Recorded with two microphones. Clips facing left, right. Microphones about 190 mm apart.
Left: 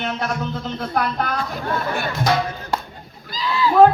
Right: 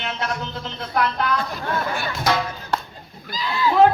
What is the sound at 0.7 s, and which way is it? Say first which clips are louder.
Speech: right 1 dB; 45° left (ahead or behind).